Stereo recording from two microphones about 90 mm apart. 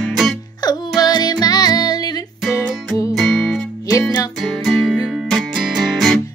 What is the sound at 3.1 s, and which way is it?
Music, centre (ahead or behind).